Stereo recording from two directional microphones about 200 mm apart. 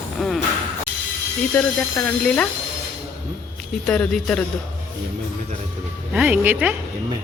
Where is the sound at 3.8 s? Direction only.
5° left (ahead or behind).